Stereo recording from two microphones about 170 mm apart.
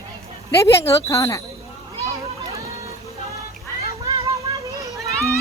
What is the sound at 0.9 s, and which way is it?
Speech, 20° left (ahead or behind).